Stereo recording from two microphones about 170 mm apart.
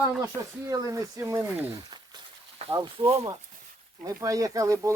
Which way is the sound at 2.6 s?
20° right (ahead or behind).